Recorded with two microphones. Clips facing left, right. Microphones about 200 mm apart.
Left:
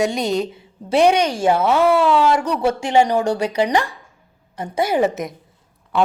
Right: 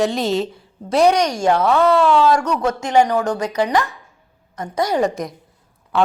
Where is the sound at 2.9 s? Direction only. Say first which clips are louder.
Right 1 dB; 25° left (ahead or behind).